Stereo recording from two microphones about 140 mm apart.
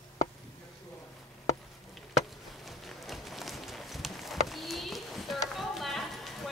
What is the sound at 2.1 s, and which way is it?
Walk, centre (ahead or behind).